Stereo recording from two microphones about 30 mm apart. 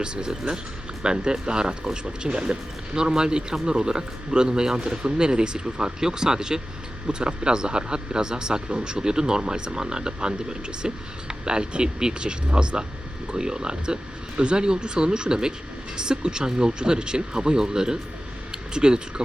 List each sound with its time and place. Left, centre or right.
0.0 s speech: right